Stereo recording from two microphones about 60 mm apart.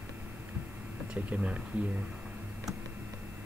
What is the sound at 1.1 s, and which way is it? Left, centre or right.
Speech, right.